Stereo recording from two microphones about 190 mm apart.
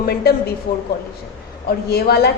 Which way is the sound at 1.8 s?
55° left (ahead or behind).